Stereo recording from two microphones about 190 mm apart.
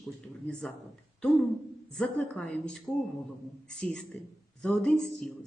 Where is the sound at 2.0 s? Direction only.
5° left (ahead or behind).